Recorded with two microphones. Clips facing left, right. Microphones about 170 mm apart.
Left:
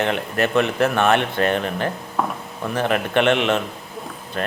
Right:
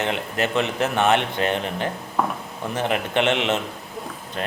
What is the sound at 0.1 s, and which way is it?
Speech, 20° right (ahead or behind).